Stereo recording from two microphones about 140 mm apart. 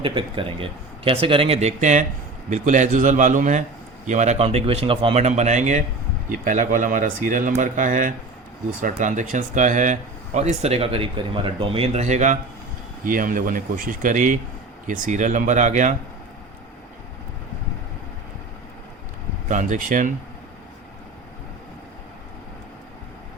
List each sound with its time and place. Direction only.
0.0 s speech: 35° right (ahead or behind); by 5.8 s 60° right (ahead or behind)
6.2 s speech: 75° right (ahead or behind)
13.1 s speech: 80° right
19.5 s speech: 65° right (ahead or behind)